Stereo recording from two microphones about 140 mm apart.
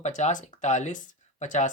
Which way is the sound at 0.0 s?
60° left (ahead or behind).